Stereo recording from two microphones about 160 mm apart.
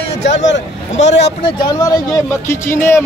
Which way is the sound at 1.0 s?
45° left (ahead or behind).